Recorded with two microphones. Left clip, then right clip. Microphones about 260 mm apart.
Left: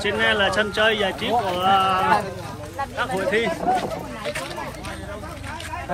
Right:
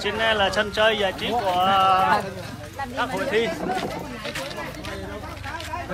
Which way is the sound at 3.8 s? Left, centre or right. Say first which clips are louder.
Left 2 dB; left.